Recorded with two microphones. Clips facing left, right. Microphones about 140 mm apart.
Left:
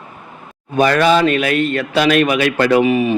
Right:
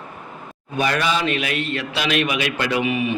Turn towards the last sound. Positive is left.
turn(degrees=40)  # may be behind; listen again after turning